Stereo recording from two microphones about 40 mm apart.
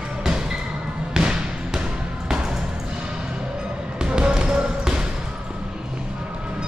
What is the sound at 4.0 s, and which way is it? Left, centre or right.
Basketball bounce, right.